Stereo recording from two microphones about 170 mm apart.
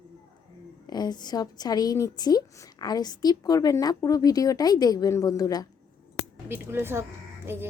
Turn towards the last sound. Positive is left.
turn(degrees=-15)  # may be behind; listen again after turning